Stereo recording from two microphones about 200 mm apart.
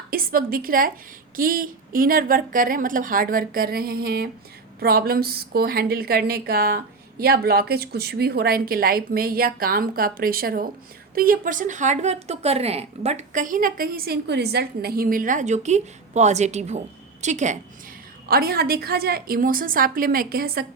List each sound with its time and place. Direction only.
0.1 s a woman's voice: 45° right (ahead or behind)
18.3 s a woman's voice: 50° right (ahead or behind)